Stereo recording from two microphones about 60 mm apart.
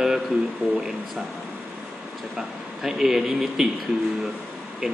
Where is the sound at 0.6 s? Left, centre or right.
Right.